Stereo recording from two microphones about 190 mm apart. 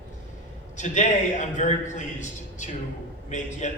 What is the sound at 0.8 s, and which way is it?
A man's voice, 40° left (ahead or behind).